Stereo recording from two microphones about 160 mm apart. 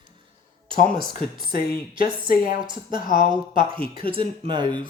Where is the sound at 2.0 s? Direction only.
65° left (ahead or behind).